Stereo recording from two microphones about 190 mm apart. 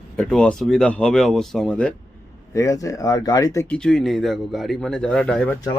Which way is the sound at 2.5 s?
15° left (ahead or behind).